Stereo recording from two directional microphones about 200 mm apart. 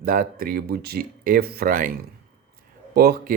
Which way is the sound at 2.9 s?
50° right (ahead or behind).